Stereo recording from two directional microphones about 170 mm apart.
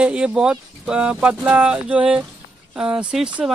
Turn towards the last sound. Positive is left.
turn(degrees=-5)  # may be behind; listen again after turning